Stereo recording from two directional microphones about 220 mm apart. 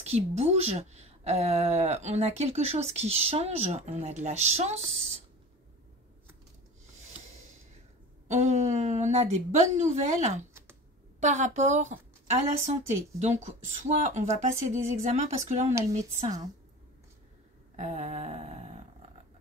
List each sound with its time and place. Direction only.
0.0 s speech: 30° right (ahead or behind)
8.3 s a woman's voice: 30° right (ahead or behind)
17.7 s a woman's voice: 30° right (ahead or behind)